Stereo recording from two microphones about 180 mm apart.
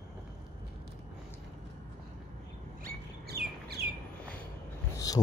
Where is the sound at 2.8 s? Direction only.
60° right (ahead or behind).